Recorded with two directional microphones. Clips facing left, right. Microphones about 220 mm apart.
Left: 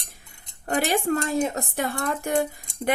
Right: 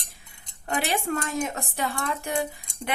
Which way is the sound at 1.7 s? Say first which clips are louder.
Left 3 dB; 50° left (ahead or behind).